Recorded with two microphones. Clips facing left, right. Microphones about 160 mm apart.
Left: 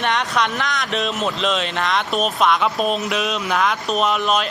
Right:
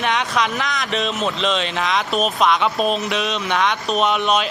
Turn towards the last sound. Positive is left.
turn(degrees=0)  # may be behind; listen again after turning